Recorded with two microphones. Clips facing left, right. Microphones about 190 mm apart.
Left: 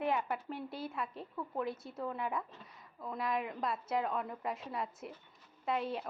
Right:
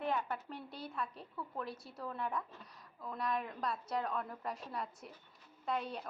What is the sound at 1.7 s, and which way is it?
Speech, 20° left (ahead or behind).